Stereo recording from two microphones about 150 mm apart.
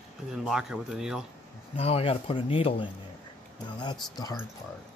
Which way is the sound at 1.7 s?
40° left (ahead or behind).